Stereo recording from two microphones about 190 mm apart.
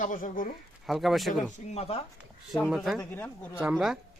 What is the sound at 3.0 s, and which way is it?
Speech, 10° left (ahead or behind).